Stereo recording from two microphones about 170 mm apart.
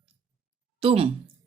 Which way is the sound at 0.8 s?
35° right (ahead or behind).